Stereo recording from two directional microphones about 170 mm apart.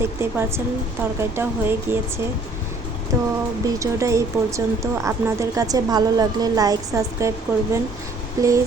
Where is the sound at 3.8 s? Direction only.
15° right (ahead or behind).